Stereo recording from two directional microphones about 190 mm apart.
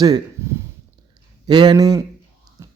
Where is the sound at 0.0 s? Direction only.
20° right (ahead or behind).